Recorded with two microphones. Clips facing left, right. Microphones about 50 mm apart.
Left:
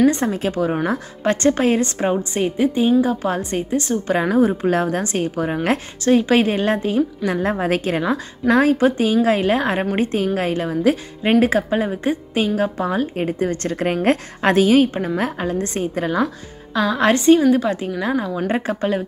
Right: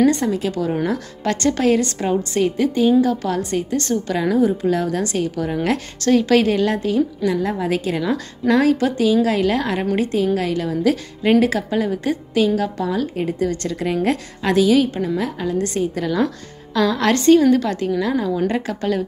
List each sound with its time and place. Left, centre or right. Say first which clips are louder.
0.0 s a woman's voice: even; left
3.7 s a woman's voice: left 1 dB; centre
4.1 s a woman's voice: left 2 dB; left
5.9 s a woman's voice: even; left
7.3 s a woman's voice: left 1 dB; left
15.5 s a woman's voice: right 1 dB; left
16.7 s a woman's voice: even; centre